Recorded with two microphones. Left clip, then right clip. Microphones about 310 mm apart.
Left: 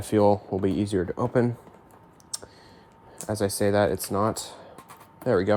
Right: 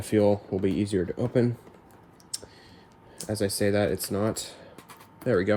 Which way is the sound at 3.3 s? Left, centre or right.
Centre.